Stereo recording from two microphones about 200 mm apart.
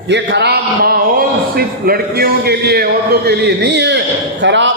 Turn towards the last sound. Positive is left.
turn(degrees=-65)  # may be behind; listen again after turning